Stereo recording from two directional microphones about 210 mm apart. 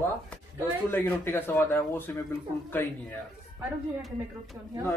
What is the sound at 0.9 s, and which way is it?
Speech, 10° left (ahead or behind).